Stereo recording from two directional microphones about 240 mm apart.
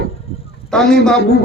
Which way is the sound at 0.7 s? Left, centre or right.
Centre.